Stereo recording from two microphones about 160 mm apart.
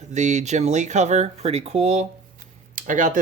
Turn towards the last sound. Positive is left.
turn(degrees=-55)  # may be behind; listen again after turning